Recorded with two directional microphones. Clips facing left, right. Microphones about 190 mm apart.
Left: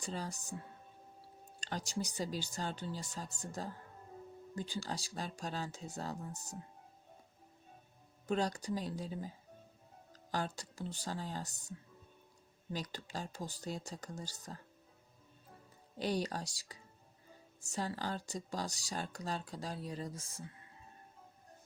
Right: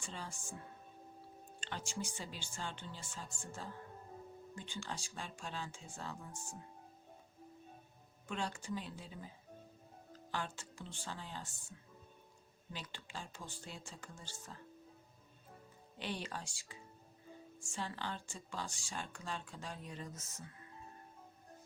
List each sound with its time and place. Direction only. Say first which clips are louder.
0.0 s speech: left 6 dB; 40° left (ahead or behind)
1.6 s speech: left 4 dB; 40° left (ahead or behind)
8.3 s speech: left 6 dB; 40° left (ahead or behind)
12.7 s speech: left 7 dB; 40° left (ahead or behind)
16.0 s speech: left 7 dB; 40° left (ahead or behind)